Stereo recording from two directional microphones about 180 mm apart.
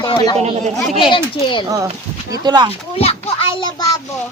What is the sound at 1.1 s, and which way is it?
Speech, 25° left (ahead or behind).